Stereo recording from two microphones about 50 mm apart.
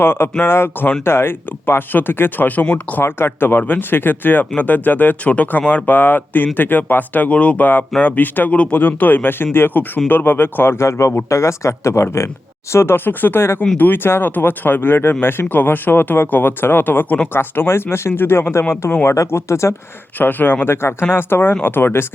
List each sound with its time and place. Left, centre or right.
0.0 s speech: left
2.6 s speech: left
3.0 s speech: left
12.7 s speech: left
19.0 s speech: left
20.1 s speech: left